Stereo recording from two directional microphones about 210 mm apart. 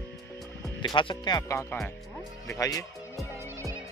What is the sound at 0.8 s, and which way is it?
Speech, 25° left (ahead or behind).